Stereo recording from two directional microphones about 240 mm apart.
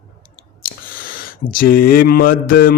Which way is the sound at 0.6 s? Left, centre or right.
Left.